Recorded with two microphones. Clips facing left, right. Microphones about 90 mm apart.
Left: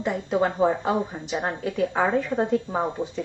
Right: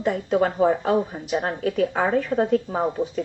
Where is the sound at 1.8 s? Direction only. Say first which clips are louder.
Left 1 dB; centre (ahead or behind).